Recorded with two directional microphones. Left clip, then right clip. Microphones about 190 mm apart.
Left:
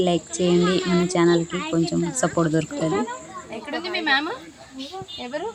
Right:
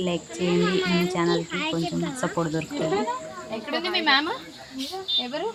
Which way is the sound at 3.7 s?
20° right (ahead or behind).